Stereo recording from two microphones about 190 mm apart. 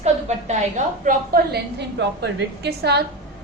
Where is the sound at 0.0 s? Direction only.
35° right (ahead or behind).